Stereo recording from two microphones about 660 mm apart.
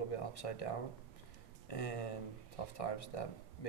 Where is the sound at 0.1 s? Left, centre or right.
Left.